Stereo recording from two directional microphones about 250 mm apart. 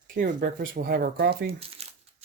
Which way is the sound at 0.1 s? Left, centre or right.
Right.